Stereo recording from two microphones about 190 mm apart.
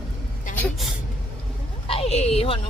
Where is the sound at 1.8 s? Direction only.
30° left (ahead or behind).